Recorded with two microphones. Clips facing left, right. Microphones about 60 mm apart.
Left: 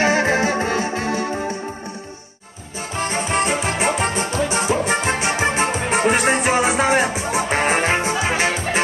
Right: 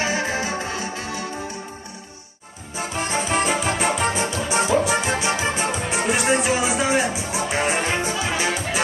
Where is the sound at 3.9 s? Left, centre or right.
Left.